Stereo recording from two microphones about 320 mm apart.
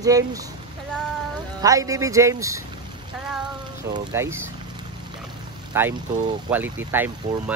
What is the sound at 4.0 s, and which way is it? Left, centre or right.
Speech, centre.